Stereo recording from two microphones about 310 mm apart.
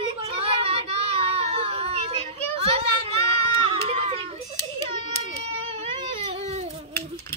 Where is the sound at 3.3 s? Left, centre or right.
Centre.